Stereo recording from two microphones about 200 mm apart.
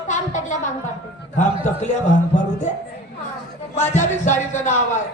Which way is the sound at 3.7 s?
35° left (ahead or behind).